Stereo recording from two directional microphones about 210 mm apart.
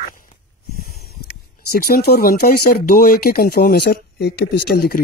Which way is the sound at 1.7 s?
50° left (ahead or behind).